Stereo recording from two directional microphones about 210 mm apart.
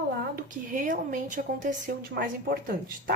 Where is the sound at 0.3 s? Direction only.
40° right (ahead or behind).